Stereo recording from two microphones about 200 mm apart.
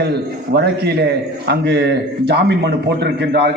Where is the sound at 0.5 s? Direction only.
55° right (ahead or behind).